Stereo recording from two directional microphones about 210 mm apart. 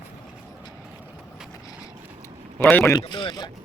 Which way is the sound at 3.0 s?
20° left (ahead or behind).